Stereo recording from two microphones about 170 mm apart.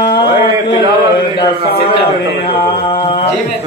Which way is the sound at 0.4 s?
30° left (ahead or behind).